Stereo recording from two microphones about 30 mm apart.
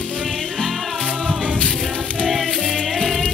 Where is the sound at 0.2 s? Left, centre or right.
Centre.